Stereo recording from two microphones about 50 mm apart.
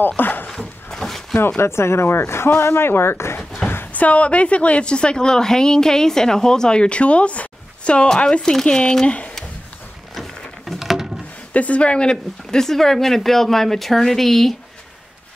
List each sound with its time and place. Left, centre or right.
0.2 s dog: left
0.6 s a sound: centre
1.6 s speech: left
3.9 s a woman's voice: left
10.6 s a sound: centre
11.5 s speech: left; by 14.5 s centre